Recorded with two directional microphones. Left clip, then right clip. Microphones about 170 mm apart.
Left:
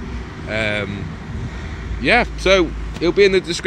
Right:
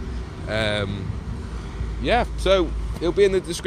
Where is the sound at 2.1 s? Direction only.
10° left (ahead or behind).